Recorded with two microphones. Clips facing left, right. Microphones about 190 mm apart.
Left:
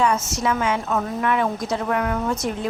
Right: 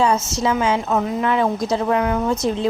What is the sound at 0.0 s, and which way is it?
A woman's voice, 25° right (ahead or behind).